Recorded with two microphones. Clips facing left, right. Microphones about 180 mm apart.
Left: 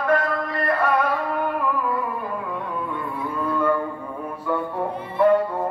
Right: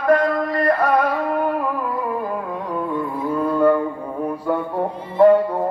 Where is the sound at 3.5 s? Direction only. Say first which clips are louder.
Right 6 dB; 40° right (ahead or behind).